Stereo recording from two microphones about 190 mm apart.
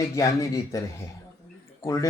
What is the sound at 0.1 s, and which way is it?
Speech, 15° left (ahead or behind).